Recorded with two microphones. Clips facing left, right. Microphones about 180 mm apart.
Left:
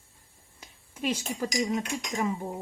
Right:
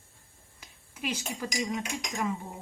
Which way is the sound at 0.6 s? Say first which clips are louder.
Left 5 dB; 30° left (ahead or behind).